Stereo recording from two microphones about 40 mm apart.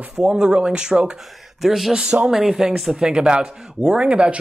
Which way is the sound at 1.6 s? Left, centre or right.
Centre.